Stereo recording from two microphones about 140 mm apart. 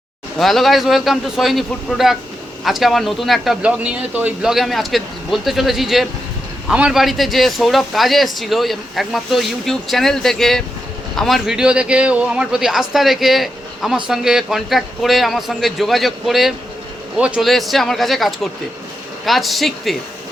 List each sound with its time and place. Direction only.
0.3 s speech: centre (ahead or behind)
4.5 s speech: centre (ahead or behind)